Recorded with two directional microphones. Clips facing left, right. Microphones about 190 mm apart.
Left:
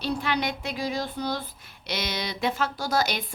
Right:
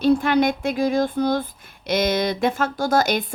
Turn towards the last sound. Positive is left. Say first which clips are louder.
# right 7 dB
turn(degrees=-50)  # may be behind; listen again after turning